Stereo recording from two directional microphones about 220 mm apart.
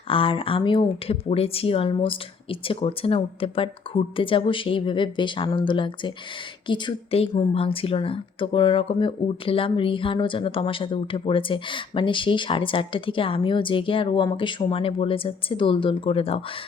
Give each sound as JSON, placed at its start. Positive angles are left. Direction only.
{"t": 0.1, "sound": "a woman's voice", "side_deg": 25}